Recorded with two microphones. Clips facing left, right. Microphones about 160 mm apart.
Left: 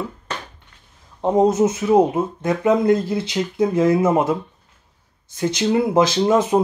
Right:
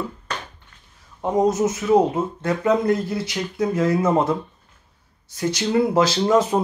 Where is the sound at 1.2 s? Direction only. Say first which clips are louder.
Left 3 dB; 25° left (ahead or behind).